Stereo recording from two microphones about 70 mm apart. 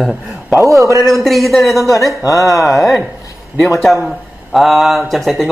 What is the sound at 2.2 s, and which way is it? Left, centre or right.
Speech, left.